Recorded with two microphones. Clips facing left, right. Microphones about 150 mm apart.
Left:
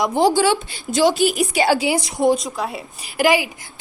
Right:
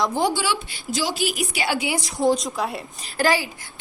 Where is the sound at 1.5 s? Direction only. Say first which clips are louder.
Left 8 dB; 45° left (ahead or behind).